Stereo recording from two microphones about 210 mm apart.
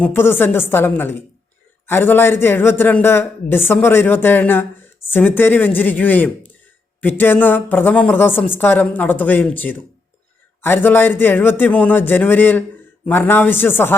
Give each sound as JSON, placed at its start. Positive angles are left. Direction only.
{"t": 0.0, "sound": "speech", "side_deg": 10}